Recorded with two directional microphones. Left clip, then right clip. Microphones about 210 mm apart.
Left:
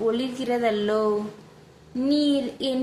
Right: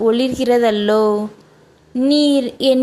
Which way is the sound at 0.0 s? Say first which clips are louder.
Right 10 dB; 40° right (ahead or behind).